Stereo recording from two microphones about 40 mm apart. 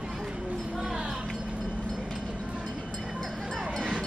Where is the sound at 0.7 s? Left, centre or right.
Centre.